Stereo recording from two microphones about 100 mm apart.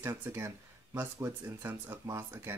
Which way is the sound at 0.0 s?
25° right (ahead or behind).